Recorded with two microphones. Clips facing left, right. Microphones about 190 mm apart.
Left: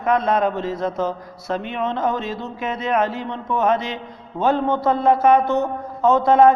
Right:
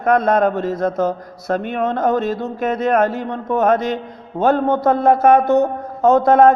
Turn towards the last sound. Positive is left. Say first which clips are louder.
# right 3 dB
turn(degrees=-45)  # may be behind; listen again after turning